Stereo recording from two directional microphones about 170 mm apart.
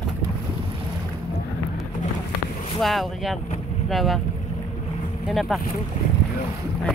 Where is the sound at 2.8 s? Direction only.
Centre (ahead or behind).